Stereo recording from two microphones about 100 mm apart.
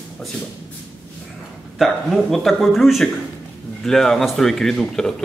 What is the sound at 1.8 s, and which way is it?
Speech, centre (ahead or behind).